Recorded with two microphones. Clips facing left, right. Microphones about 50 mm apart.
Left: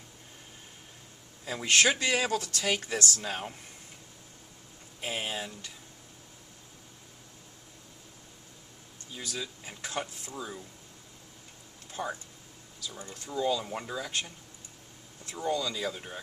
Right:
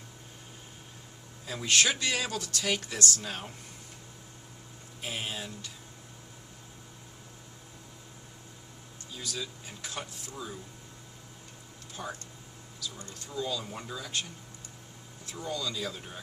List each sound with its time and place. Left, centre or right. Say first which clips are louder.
1.5 s speech: left 2 dB; left
4.9 s speech: left 2 dB; left
9.1 s speech: even; left
10.0 s speech: left 4 dB; centre
12.0 s speech: left 4 dB; left
15.4 s speech: left 4 dB; left